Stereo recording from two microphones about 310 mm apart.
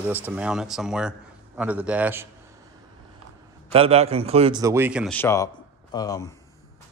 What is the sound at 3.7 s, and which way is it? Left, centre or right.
A man's voice, centre.